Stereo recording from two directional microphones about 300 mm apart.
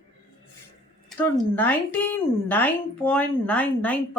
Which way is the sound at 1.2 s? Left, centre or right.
Centre.